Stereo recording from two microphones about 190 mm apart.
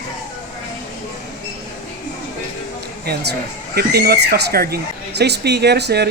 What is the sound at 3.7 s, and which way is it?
Speech, 55° right (ahead or behind).